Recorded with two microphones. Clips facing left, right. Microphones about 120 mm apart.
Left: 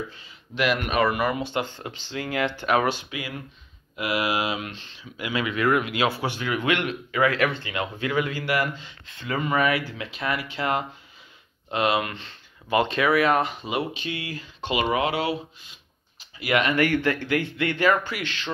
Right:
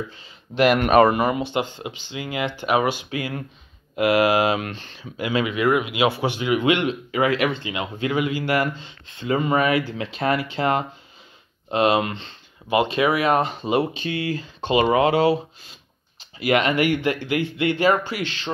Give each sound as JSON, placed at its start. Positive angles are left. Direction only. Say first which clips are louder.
{"t": 0.6, "sound": "speech", "louder": "right 8 dB", "side_deg": -50}
{"t": 1.0, "sound": "speech", "louder": "right 5 dB", "side_deg": -25}
{"t": 3.1, "sound": "speech", "louder": "right 6 dB", "side_deg": -30}
{"t": 3.9, "sound": "speech", "louder": "right 8 dB", "side_deg": -55}
{"t": 5.1, "sound": "speech", "louder": "right 4 dB", "side_deg": -25}
{"t": 8.5, "sound": "speech", "louder": "right 3 dB", "side_deg": -30}
{"t": 12.6, "sound": "speech", "louder": "right 2 dB", "side_deg": -15}